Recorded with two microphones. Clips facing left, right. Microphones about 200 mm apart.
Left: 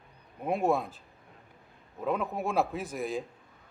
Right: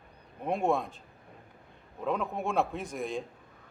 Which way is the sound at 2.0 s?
5° left (ahead or behind).